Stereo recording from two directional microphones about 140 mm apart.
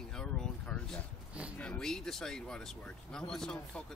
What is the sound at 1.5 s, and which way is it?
Speech, 5° left (ahead or behind).